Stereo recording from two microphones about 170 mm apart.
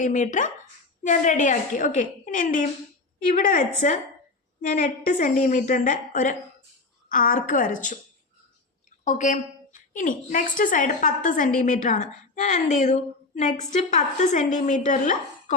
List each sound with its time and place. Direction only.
0.0 s a woman's voice: 45° left (ahead or behind)
9.0 s a woman's voice: 50° left (ahead or behind)